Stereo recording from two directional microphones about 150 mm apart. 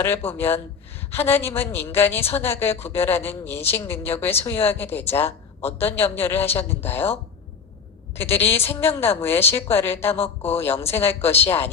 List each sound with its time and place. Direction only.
0.0 s speech: 15° left (ahead or behind)
8.1 s speech: 15° left (ahead or behind)